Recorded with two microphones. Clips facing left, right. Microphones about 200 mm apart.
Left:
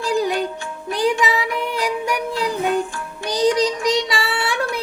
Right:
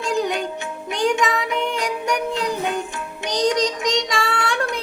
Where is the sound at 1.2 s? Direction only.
5° left (ahead or behind).